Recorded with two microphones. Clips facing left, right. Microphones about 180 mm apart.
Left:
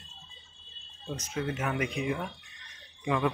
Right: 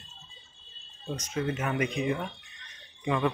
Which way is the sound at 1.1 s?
5° left (ahead or behind).